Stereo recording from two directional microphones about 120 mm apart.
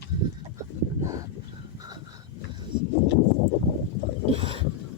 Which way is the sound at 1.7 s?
35° right (ahead or behind).